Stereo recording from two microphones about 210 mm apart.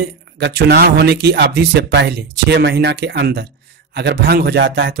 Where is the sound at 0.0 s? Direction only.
50° right (ahead or behind).